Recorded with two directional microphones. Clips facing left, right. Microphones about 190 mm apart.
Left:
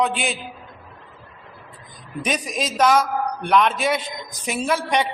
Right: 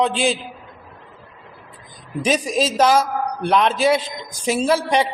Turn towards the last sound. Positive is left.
turn(degrees=-30)  # may be behind; listen again after turning